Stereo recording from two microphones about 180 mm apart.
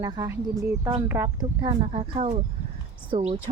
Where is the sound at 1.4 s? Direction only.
25° right (ahead or behind).